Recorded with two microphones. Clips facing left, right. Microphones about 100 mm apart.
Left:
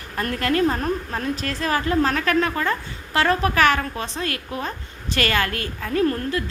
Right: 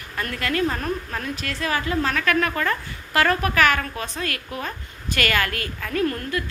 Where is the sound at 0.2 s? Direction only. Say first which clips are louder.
Left 3 dB; 40° left (ahead or behind).